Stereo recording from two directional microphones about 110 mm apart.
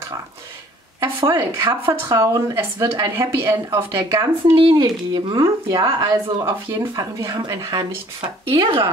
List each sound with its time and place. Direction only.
1.0 s a woman's voice: 30° right (ahead or behind)
4.6 s speech: 40° right (ahead or behind)
8.2 s speech: 50° right (ahead or behind)